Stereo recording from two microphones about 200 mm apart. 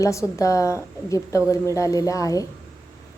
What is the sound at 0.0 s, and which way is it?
A woman's voice, 15° left (ahead or behind).